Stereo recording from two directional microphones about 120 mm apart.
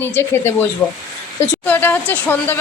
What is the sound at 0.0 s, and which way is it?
Speech, 20° left (ahead or behind).